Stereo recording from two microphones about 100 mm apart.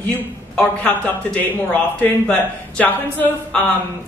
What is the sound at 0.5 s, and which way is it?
Speech, 15° left (ahead or behind).